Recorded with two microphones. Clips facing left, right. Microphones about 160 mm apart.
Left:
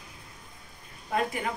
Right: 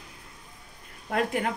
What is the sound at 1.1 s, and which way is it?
Speech, 70° right (ahead or behind).